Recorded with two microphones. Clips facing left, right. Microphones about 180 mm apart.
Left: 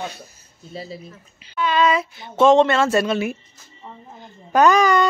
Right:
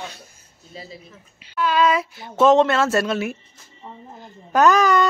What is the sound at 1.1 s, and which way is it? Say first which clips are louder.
Speech: even; 5° right (ahead or behind).